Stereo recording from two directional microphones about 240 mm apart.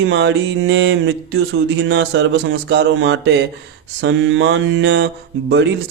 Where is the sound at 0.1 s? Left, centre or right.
Right.